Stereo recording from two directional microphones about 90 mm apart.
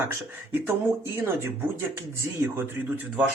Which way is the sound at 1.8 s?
30° right (ahead or behind).